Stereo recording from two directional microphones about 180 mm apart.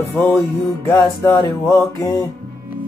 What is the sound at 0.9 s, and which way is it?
Music, 15° left (ahead or behind).